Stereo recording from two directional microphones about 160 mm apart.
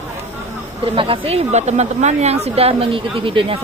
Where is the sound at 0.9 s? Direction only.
35° right (ahead or behind).